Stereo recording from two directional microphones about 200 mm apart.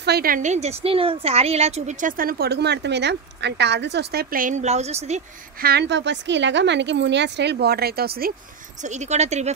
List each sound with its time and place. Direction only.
0.0 s a woman's voice: 50° right (ahead or behind); by 5.2 s 30° right (ahead or behind)
5.6 s speech: 55° right (ahead or behind)
8.8 s speech: 35° right (ahead or behind)